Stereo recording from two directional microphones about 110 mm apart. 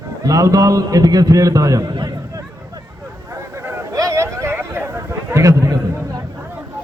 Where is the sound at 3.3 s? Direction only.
30° right (ahead or behind).